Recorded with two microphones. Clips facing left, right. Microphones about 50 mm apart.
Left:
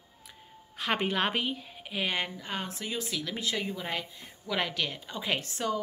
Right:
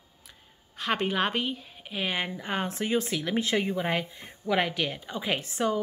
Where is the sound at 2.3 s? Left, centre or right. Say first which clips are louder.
Right 6 dB; right.